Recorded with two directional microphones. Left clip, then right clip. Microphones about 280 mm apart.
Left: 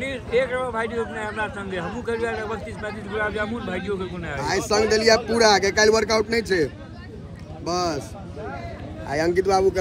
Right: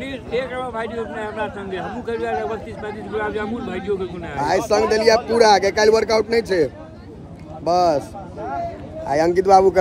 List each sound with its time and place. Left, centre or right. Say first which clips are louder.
0.0 s a man's voice: left 2 dB; centre
4.4 s speech: right 4 dB; centre
9.0 s speech: right 4 dB; right